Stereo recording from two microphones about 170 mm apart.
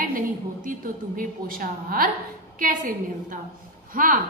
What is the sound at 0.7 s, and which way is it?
A woman's voice, 55° right (ahead or behind).